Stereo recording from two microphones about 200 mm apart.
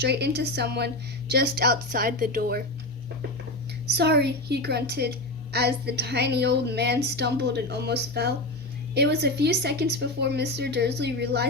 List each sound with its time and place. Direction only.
0.0 s a woman's voice: 55° right (ahead or behind)
3.9 s a woman's voice: 55° right (ahead or behind)